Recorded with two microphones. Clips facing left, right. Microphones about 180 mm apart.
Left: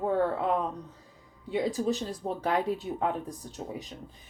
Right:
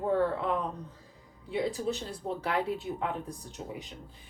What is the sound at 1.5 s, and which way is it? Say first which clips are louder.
Speech: left 3 dB; 40° left (ahead or behind).